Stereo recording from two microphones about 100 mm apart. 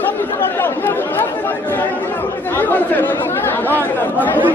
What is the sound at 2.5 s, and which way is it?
Speech, 20° left (ahead or behind).